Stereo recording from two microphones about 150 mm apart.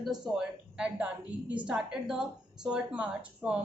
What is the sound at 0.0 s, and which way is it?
A woman's voice, 5° right (ahead or behind).